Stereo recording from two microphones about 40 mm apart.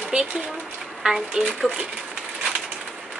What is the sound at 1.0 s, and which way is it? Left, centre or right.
Speech, centre.